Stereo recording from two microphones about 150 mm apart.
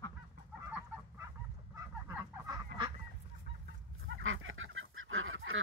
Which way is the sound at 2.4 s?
30° right (ahead or behind).